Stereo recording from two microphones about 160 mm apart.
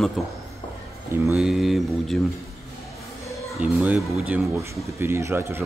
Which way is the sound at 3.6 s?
10° right (ahead or behind).